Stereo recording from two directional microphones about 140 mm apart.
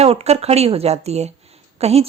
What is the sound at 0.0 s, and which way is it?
A woman's voice, 45° right (ahead or behind).